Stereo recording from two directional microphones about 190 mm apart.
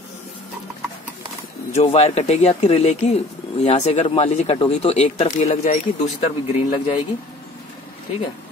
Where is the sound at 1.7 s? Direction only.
35° left (ahead or behind).